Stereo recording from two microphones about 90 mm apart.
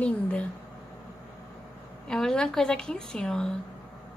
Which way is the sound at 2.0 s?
5° left (ahead or behind).